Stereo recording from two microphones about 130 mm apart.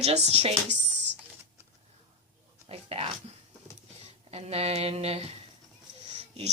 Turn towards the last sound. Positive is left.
turn(degrees=-55)  # may be behind; listen again after turning